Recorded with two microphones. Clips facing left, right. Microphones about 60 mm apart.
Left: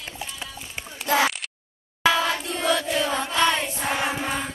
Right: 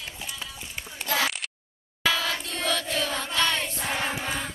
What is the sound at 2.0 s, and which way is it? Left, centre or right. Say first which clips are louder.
Singing: left 5 dB; centre.